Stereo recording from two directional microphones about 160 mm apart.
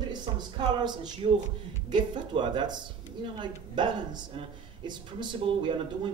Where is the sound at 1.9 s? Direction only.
30° right (ahead or behind).